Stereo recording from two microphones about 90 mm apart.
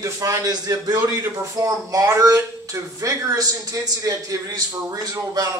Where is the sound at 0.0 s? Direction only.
40° right (ahead or behind).